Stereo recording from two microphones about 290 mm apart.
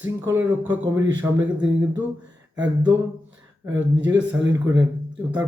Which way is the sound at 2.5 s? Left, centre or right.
Right.